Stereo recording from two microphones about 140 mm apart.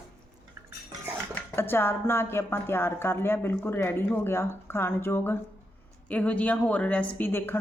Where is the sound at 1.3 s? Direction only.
15° left (ahead or behind).